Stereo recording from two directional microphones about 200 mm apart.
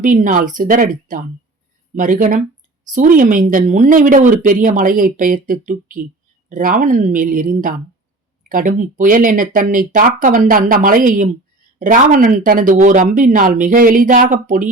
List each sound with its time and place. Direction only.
0.0 s a woman's voice: 40° right (ahead or behind)